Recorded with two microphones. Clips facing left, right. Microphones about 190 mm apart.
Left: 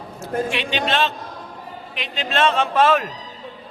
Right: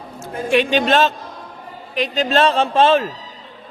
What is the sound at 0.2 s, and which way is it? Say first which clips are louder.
A man's voice: right 6 dB; 45° right (ahead or behind).